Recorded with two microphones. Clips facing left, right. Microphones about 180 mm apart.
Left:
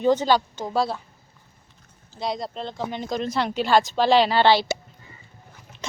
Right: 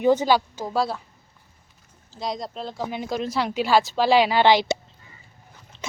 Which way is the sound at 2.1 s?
Centre (ahead or behind).